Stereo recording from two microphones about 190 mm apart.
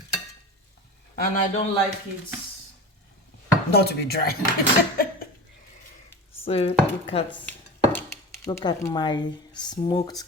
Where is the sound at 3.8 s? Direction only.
55° left (ahead or behind).